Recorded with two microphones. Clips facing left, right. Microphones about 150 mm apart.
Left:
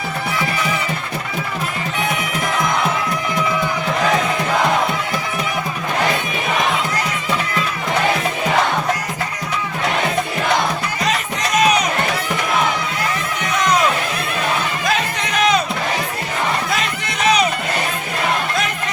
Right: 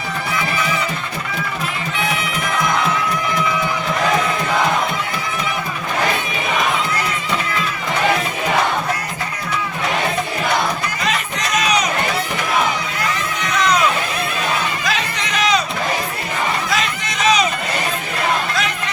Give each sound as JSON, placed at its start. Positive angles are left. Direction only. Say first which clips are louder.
{"t": 11.5, "sound": "crowd", "louder": "left 4 dB", "side_deg": 55}
{"t": 14.8, "sound": "music", "louder": "left 2 dB", "side_deg": 50}
{"t": 16.7, "sound": "a sound", "louder": "right 1 dB", "side_deg": 60}